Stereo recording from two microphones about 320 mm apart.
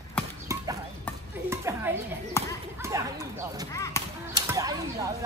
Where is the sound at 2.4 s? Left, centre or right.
Centre.